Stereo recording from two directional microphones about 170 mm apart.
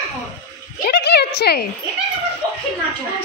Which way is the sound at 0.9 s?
75° left (ahead or behind).